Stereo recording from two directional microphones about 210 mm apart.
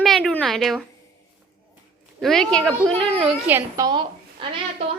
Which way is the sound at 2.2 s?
Centre (ahead or behind).